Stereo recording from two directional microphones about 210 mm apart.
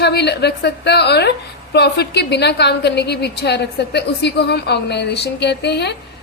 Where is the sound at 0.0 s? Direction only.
55° left (ahead or behind).